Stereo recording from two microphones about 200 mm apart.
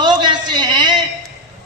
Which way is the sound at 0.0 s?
20° right (ahead or behind).